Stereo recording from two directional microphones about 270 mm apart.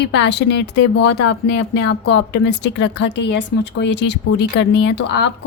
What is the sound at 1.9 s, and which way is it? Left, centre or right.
A woman's voice, left.